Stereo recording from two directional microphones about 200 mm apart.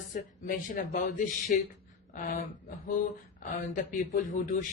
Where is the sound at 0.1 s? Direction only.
45° left (ahead or behind).